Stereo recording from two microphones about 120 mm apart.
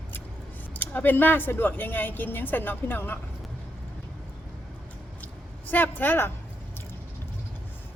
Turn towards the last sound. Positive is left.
turn(degrees=15)  # may be behind; listen again after turning